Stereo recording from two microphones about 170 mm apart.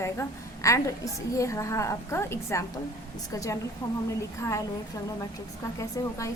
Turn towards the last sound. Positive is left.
turn(degrees=20)  # may be behind; listen again after turning